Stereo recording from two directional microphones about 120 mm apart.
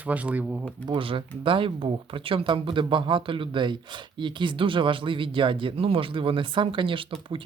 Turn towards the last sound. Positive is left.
turn(degrees=-45)  # may be behind; listen again after turning